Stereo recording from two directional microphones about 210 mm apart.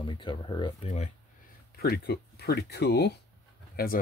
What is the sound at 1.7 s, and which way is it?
Speech, 45° left (ahead or behind).